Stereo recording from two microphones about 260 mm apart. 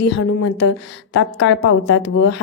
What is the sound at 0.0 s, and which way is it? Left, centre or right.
A woman's voice, left.